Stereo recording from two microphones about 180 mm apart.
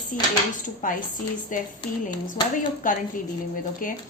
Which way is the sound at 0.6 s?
45° left (ahead or behind).